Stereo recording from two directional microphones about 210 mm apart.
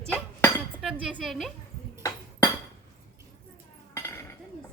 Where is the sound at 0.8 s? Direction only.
5° right (ahead or behind).